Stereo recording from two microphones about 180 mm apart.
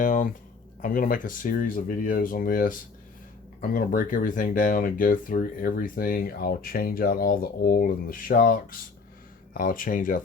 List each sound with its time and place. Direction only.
0.0 s speech: 45° left (ahead or behind)